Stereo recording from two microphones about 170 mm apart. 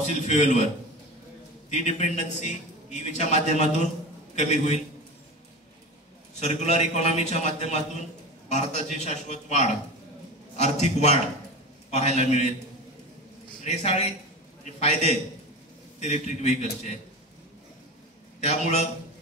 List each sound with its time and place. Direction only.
0.0 s a man's voice: 45° left (ahead or behind)
1.7 s a man's voice: 45° left (ahead or behind)
6.4 s a man's voice: 40° left (ahead or behind)
13.7 s a man's voice: 40° left (ahead or behind)
18.4 s a man's voice: 40° left (ahead or behind)